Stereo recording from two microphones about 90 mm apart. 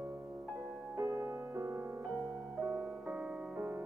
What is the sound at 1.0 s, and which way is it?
Music, 35° right (ahead or behind).